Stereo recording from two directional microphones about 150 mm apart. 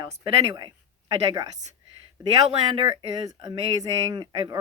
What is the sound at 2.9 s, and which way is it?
Speech, 25° right (ahead or behind).